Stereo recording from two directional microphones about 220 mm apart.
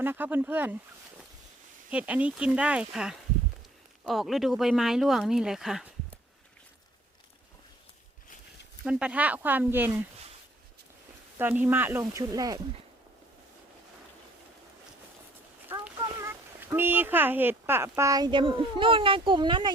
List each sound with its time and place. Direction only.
0.0 s speech: 10° right (ahead or behind)
1.9 s speech: 5° right (ahead or behind)
8.8 s speech: 5° right (ahead or behind)
11.3 s speech: 10° right (ahead or behind)
16.0 s speech: 15° right (ahead or behind)